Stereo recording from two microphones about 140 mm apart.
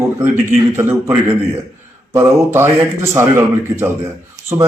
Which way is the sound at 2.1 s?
15° right (ahead or behind).